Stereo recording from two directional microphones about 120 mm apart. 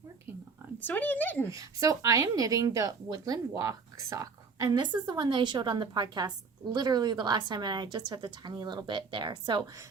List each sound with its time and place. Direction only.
0.8 s speech: 15° left (ahead or behind)
1.5 s speech: 30° right (ahead or behind)